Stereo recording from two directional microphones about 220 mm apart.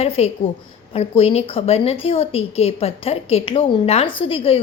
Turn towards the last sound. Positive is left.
turn(degrees=25)  # may be behind; listen again after turning